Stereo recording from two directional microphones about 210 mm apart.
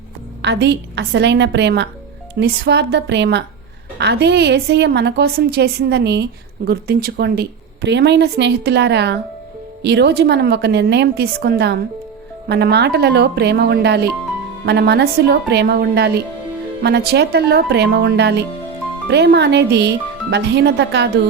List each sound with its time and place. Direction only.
0.4 s a woman's voice: 55° right (ahead or behind)